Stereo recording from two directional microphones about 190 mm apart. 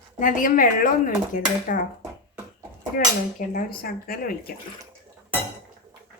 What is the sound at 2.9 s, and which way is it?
Speech, 45° left (ahead or behind).